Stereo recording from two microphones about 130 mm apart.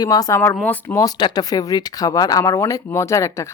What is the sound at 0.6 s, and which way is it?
Speech, 15° left (ahead or behind).